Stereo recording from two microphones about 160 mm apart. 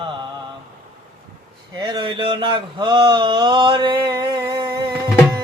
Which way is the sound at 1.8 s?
30° right (ahead or behind).